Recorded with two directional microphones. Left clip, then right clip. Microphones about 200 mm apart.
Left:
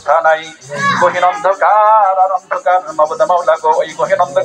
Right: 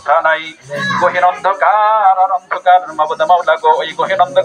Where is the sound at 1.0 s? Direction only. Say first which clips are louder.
Right 1 dB; 55° left (ahead or behind).